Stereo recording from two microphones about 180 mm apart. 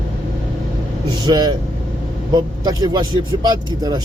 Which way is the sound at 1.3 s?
20° right (ahead or behind).